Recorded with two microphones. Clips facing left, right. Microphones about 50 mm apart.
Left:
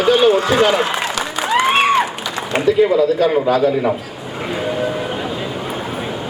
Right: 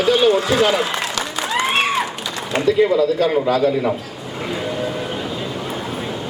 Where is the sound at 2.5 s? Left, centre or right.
Left.